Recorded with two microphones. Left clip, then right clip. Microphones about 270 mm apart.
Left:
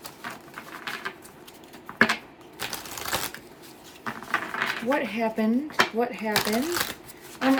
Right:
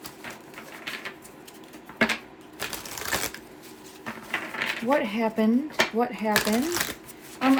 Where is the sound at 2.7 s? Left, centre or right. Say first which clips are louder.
Right 1 dB; centre.